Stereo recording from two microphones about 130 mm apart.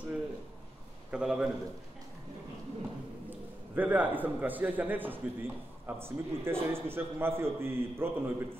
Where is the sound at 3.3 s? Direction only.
15° right (ahead or behind).